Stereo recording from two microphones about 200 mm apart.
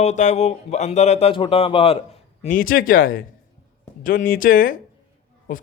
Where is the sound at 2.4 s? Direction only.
45° left (ahead or behind).